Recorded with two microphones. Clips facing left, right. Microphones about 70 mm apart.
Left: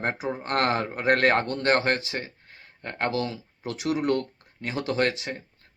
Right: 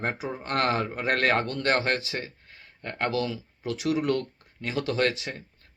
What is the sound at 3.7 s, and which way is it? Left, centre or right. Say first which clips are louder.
Speech: even; left.